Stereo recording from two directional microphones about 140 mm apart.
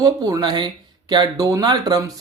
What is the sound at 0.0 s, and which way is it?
Speech, 25° right (ahead or behind).